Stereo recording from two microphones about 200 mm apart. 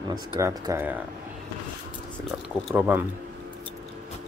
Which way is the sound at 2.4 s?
5° right (ahead or behind).